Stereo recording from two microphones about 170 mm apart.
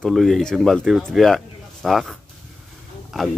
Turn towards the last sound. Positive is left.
turn(degrees=0)  # may be behind; listen again after turning